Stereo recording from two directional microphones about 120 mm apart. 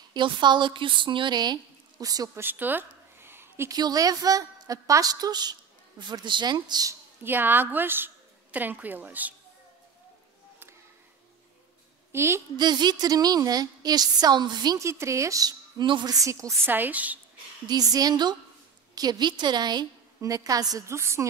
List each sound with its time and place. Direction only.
0.1 s a woman's voice: 40° right (ahead or behind)
2.4 s a sound: 15° right (ahead or behind)
3.7 s a woman's voice: 30° right (ahead or behind)
7.2 s a woman's voice: 15° right (ahead or behind)
12.1 s a woman's voice: 20° right (ahead or behind)
12.5 s a woman's voice: 35° right (ahead or behind)
14.8 s a woman's voice: 25° right (ahead or behind)
15.8 s a woman's voice: 40° right (ahead or behind); by 17.2 s 15° right (ahead or behind)
17.6 s a woman's voice: 30° right (ahead or behind)